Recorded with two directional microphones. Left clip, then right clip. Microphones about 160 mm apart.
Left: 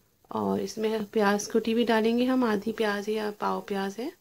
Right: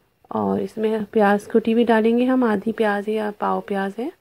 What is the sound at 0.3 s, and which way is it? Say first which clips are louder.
Speech: right 6 dB; 25° right (ahead or behind).